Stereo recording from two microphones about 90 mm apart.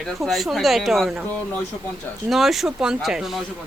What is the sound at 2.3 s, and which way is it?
A woman's voice, centre (ahead or behind).